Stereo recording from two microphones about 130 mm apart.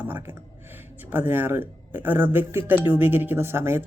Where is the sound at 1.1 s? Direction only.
15° right (ahead or behind).